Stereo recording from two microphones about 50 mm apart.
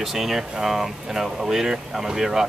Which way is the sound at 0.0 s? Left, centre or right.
Centre.